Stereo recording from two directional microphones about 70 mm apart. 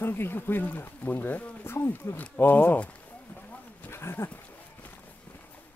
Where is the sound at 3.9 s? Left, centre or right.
Left.